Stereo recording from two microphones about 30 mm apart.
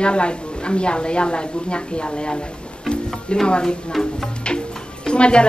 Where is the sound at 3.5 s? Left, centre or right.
Left.